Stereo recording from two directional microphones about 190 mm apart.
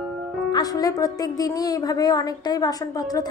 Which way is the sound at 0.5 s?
20° left (ahead or behind).